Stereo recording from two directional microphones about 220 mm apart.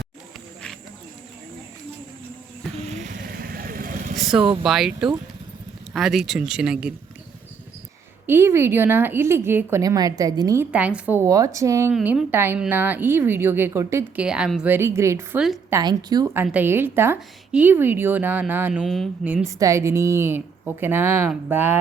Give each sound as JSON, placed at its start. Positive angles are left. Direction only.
{"t": 2.7, "sound": "vehicle", "side_deg": -35}
{"t": 3.2, "sound": "vehicle", "side_deg": -45}
{"t": 4.6, "sound": "speech", "side_deg": 0}
{"t": 8.3, "sound": "a woman's voice", "side_deg": -10}
{"t": 15.8, "sound": "a woman's voice", "side_deg": -20}